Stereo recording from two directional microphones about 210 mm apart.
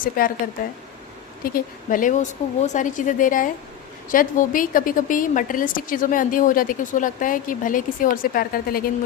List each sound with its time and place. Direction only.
0.2 s speech: 45° left (ahead or behind)
1.5 s a woman's voice: 40° left (ahead or behind)